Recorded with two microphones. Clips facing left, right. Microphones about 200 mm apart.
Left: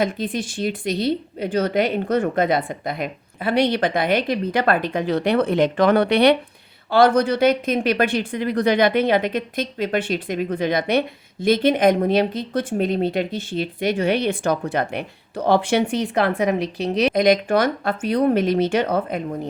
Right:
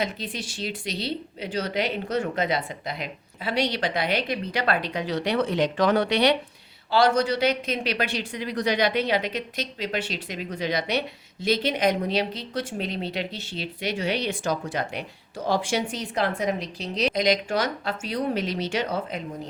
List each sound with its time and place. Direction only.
0.0 s speech: 50° left (ahead or behind)